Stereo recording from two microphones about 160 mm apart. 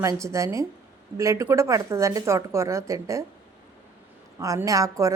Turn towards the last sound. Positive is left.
turn(degrees=-20)  # may be behind; listen again after turning